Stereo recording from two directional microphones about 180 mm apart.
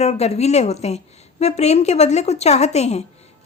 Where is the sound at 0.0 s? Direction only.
35° left (ahead or behind).